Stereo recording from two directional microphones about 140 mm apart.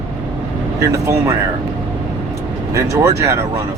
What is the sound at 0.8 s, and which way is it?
Speech, 20° right (ahead or behind).